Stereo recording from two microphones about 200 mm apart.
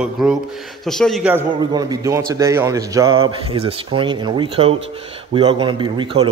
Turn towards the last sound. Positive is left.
turn(degrees=-25)  # may be behind; listen again after turning